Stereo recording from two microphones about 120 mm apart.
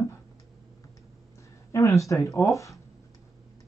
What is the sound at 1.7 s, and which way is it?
Speech, 25° left (ahead or behind).